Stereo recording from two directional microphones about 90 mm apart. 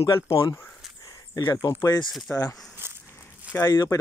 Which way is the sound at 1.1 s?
45° left (ahead or behind).